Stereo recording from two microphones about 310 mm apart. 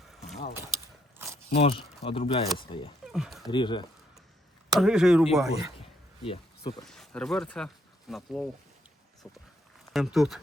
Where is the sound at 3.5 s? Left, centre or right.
Centre.